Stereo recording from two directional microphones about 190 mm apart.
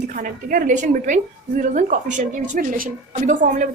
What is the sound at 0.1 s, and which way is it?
A woman's voice, 45° right (ahead or behind).